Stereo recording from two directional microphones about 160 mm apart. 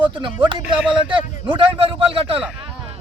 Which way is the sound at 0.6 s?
10° right (ahead or behind).